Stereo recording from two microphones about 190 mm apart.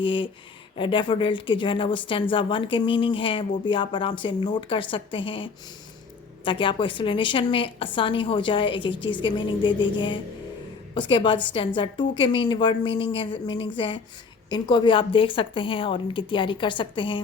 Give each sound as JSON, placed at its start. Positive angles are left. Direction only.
{"t": 0.0, "sound": "a woman's voice", "side_deg": 25}